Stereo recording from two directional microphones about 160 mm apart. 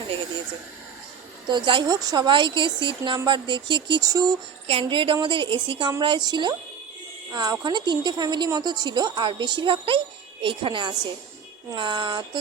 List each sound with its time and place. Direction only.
1.5 s a woman's voice: 30° right (ahead or behind)
4.6 s a woman's voice: 35° right (ahead or behind)